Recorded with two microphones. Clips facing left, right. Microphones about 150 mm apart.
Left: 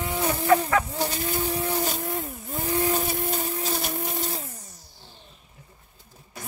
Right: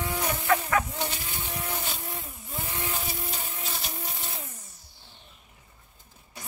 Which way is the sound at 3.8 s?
55° left (ahead or behind).